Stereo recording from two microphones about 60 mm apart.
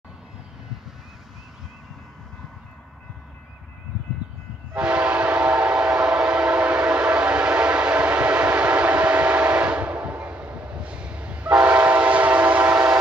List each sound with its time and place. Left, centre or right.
4.7 s train: centre
11.6 s train: right